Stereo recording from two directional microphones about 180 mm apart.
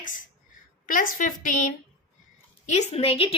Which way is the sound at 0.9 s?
45° left (ahead or behind).